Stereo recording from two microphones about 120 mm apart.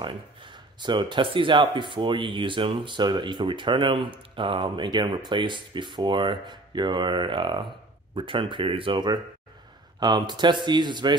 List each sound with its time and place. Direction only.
0.0 s speech: 40° right (ahead or behind)